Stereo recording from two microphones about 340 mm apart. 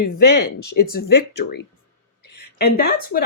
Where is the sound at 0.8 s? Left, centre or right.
Left.